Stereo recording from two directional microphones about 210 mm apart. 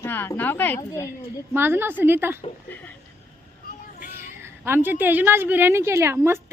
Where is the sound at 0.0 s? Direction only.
10° left (ahead or behind).